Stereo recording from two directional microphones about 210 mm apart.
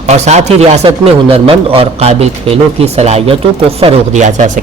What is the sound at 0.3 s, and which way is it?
A man's voice, 30° right (ahead or behind).